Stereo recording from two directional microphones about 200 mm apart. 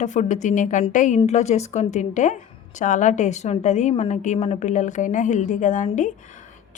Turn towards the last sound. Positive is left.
turn(degrees=40)  # may be behind; listen again after turning